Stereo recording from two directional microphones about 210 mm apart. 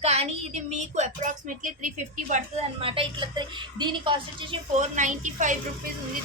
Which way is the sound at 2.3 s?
30° right (ahead or behind).